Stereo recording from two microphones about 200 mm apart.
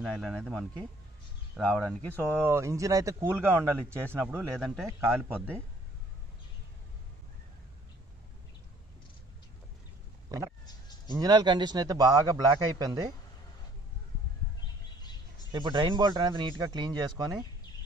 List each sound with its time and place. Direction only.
0.0 s speech: centre (ahead or behind)
2.3 s a man's voice: 10° right (ahead or behind)
11.1 s a man's voice: 20° right (ahead or behind)
15.0 s bird: 20° left (ahead or behind)
15.5 s a man's voice: 20° right (ahead or behind)